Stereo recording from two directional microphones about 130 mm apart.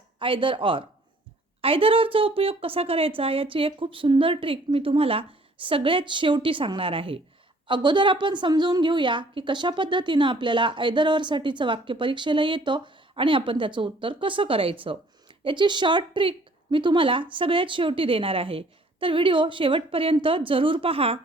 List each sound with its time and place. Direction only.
0.2 s a woman's voice: 40° right (ahead or behind)